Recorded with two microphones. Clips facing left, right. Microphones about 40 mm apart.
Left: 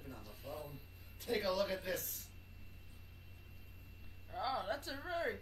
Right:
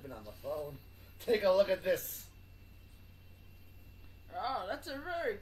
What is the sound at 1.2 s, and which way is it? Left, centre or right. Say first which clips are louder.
Speech: right 8 dB; right.